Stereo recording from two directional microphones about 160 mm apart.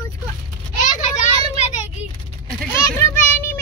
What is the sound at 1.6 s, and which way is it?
Vehicle, 45° left (ahead or behind).